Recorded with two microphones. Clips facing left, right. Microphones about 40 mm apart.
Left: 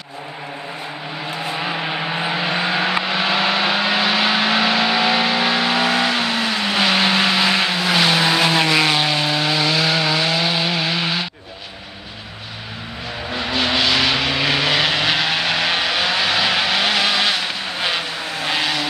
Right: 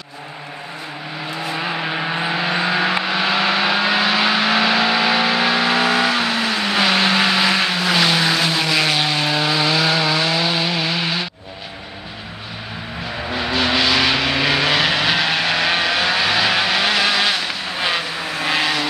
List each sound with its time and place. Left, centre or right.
1.5 s vehicle: centre
8.4 s vehicle: left
9.2 s a sound: centre
13.3 s vehicle: centre